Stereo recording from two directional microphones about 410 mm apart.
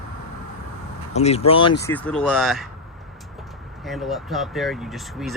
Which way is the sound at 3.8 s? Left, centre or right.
Centre.